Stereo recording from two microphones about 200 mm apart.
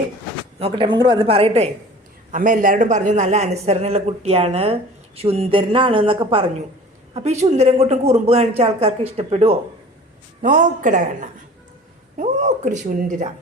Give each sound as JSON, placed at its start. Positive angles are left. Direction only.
{"t": 0.6, "sound": "a woman's voice", "side_deg": -25}
{"t": 2.3, "sound": "a man's voice", "side_deg": -40}